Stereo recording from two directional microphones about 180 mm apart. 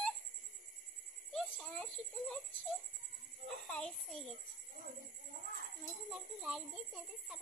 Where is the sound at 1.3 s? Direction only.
5° left (ahead or behind).